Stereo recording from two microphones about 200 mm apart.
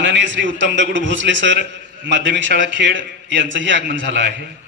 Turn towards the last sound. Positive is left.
turn(degrees=-65)  # may be behind; listen again after turning